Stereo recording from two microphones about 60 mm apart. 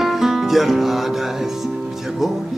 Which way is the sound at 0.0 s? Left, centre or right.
Centre.